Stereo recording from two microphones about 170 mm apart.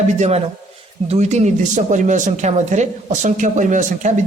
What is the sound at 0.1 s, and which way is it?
A man's voice, 40° right (ahead or behind).